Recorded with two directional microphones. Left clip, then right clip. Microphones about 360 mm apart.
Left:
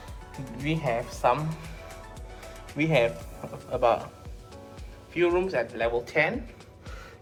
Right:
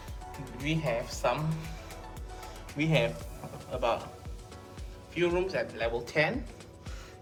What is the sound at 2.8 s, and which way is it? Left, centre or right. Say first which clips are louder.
Speech: left 5 dB; centre.